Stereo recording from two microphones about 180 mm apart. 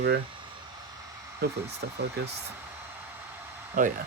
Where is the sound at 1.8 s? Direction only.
65° right (ahead or behind).